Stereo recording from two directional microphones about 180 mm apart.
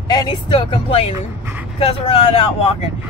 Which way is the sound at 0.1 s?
25° left (ahead or behind).